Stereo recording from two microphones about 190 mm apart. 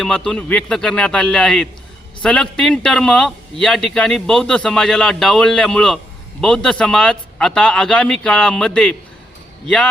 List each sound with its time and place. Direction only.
0.0 s a man's voice: 5° left (ahead or behind)